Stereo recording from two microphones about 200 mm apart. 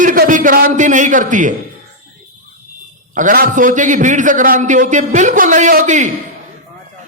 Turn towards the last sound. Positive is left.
turn(degrees=-35)  # may be behind; listen again after turning